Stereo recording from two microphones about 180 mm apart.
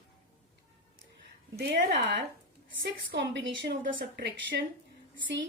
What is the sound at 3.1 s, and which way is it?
Speech, 75° right (ahead or behind).